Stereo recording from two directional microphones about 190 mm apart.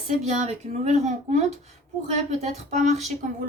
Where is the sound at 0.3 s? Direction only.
40° right (ahead or behind).